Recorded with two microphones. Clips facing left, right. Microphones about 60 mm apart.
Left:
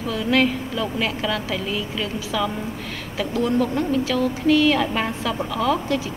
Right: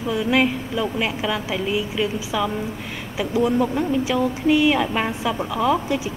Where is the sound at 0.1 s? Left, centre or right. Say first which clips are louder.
Even; centre.